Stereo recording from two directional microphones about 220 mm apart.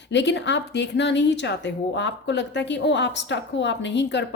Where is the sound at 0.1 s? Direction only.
55° left (ahead or behind).